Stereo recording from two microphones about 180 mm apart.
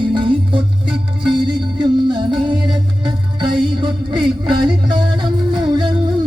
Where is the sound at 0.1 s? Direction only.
30° right (ahead or behind).